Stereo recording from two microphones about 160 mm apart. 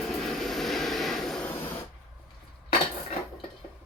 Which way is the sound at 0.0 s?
Centre (ahead or behind).